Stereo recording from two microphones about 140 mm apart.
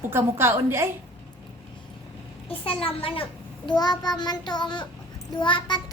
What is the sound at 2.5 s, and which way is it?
Speech, 40° left (ahead or behind).